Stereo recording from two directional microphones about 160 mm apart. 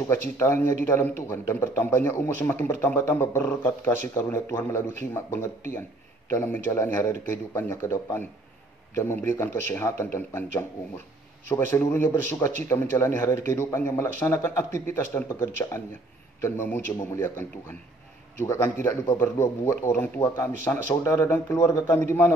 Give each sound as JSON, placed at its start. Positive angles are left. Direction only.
{"t": 0.4, "sound": "speech", "side_deg": 15}